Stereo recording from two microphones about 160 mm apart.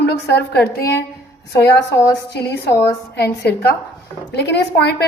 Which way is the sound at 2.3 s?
90° left.